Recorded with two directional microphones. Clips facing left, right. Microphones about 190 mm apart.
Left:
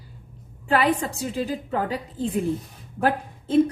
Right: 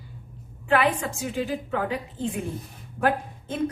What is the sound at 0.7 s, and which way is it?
A woman's voice, 35° left (ahead or behind).